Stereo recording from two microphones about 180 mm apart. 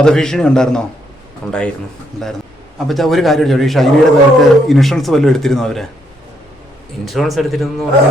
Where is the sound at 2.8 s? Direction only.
Centre (ahead or behind).